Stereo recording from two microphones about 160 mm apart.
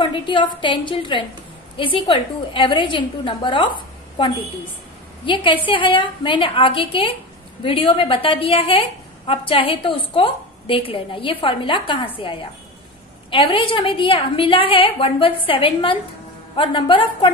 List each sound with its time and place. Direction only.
0.0 s a woman's voice: 30° left (ahead or behind)
5.2 s a woman's voice: 30° left (ahead or behind)